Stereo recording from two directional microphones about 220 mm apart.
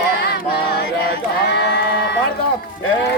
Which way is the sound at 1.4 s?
50° left (ahead or behind).